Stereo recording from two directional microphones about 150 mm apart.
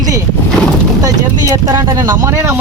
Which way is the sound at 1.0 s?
20° right (ahead or behind).